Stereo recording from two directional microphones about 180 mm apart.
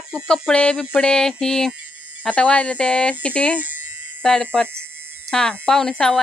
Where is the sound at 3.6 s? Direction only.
10° right (ahead or behind).